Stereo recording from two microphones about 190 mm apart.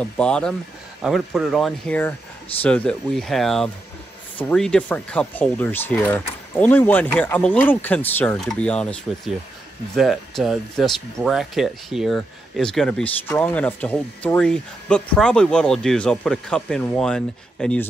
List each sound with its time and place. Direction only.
0.0 s speech: 5° left (ahead or behind)